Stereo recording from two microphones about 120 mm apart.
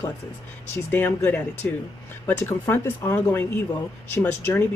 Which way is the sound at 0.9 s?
15° left (ahead or behind).